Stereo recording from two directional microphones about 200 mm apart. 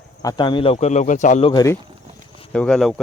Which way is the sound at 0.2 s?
20° left (ahead or behind).